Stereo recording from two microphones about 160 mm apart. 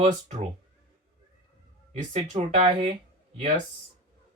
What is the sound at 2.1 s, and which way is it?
Speech, 40° right (ahead or behind).